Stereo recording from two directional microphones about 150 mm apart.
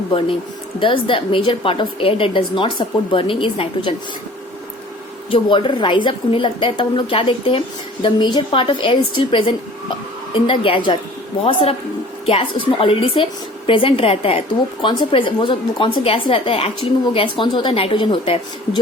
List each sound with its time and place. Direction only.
0.8 s a woman's voice: 35° left (ahead or behind)
5.3 s a woman's voice: 35° left (ahead or behind)